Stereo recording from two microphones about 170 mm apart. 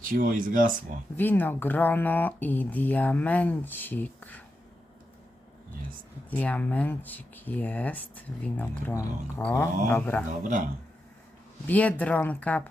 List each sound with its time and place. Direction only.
0.0 s speech: 55° right (ahead or behind)
1.1 s speech: 10° left (ahead or behind)
6.3 s speech: 10° left (ahead or behind)
10.4 s speech: 50° right (ahead or behind)
11.7 s speech: 10° left (ahead or behind)